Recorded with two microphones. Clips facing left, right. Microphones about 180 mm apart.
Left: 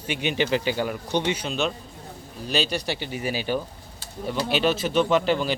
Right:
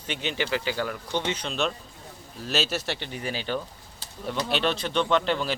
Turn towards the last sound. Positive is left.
turn(degrees=5)  # may be behind; listen again after turning